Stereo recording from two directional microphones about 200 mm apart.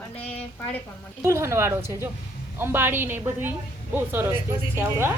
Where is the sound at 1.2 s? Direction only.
15° right (ahead or behind).